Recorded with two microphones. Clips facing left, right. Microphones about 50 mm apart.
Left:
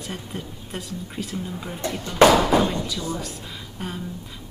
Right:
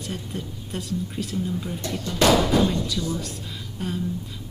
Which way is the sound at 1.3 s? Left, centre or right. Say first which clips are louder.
Right 3 dB; centre.